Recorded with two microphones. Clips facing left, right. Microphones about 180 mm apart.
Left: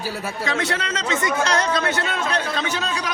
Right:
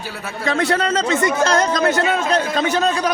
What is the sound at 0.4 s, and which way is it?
A man's voice, 45° right (ahead or behind).